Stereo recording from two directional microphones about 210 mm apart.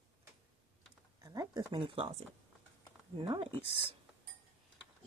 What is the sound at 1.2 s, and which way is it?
Speech, 15° right (ahead or behind).